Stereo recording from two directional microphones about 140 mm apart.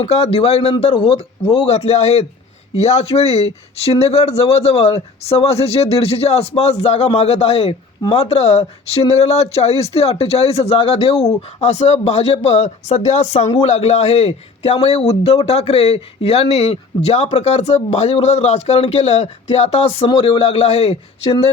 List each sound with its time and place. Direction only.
0.0 s speech: 45° left (ahead or behind)
0.8 s speech: 35° left (ahead or behind)